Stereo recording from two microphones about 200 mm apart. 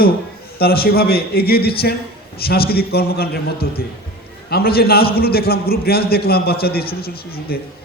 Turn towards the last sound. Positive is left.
turn(degrees=50)  # may be behind; listen again after turning